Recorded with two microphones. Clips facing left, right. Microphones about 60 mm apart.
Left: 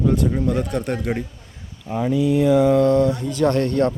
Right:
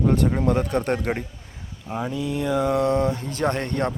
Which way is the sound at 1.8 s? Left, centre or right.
Centre.